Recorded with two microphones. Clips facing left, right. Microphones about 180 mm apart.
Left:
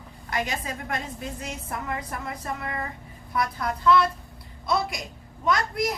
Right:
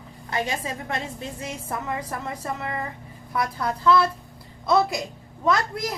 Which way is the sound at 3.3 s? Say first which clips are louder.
Right 1 dB; 30° right (ahead or behind).